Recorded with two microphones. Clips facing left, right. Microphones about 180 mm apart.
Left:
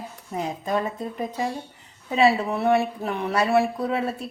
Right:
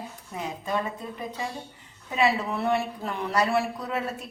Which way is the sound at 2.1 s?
25° left (ahead or behind).